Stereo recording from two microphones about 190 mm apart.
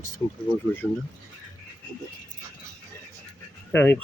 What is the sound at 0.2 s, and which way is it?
Speech, 20° left (ahead or behind).